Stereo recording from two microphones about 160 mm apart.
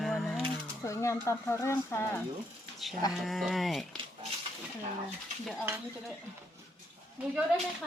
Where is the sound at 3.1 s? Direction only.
Centre (ahead or behind).